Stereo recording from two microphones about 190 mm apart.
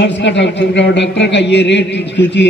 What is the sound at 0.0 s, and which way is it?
A man's voice, 70° left (ahead or behind).